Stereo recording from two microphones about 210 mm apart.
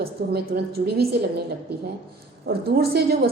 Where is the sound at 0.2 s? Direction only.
50° right (ahead or behind).